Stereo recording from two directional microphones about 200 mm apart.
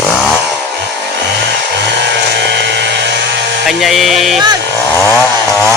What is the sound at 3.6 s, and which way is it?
Music, centre (ahead or behind).